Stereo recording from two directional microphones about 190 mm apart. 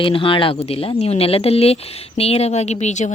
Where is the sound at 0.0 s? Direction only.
25° left (ahead or behind).